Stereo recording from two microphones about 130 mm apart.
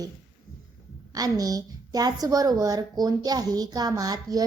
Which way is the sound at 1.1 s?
30° right (ahead or behind).